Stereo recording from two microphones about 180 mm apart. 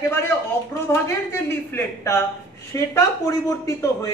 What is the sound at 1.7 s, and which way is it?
A man's voice, 15° left (ahead or behind).